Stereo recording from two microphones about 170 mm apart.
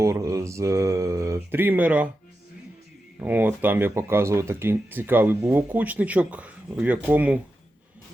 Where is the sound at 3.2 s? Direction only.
10° right (ahead or behind).